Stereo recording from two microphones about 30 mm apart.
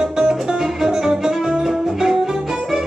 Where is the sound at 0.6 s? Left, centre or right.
Centre.